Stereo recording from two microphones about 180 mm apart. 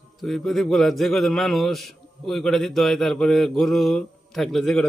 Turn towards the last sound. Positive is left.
turn(degrees=5)  # may be behind; listen again after turning